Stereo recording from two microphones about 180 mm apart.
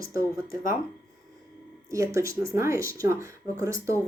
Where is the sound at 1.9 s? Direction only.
15° right (ahead or behind).